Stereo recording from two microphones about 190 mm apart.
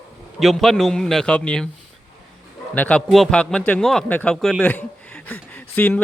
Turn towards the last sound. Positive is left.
turn(degrees=10)  # may be behind; listen again after turning